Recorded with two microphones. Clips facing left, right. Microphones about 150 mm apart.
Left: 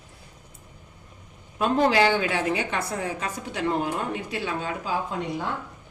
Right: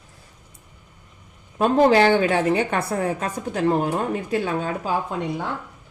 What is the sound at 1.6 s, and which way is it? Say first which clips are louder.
A woman's voice: right 5 dB; 45° right (ahead or behind).